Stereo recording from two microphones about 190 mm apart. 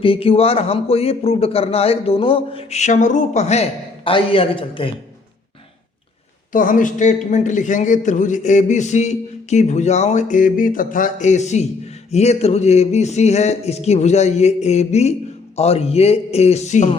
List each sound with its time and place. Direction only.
0.0 s a man's voice: 30° left (ahead or behind)
6.5 s a man's voice: 45° left (ahead or behind)